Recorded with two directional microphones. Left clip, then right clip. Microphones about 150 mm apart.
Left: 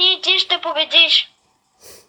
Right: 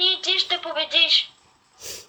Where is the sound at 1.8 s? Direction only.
30° right (ahead or behind).